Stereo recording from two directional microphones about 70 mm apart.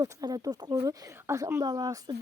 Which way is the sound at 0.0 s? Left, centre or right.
Right.